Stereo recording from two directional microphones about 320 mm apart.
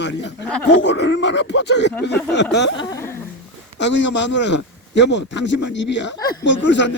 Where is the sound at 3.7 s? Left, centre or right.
Left.